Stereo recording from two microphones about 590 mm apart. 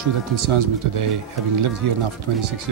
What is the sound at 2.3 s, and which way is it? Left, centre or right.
Speech, right.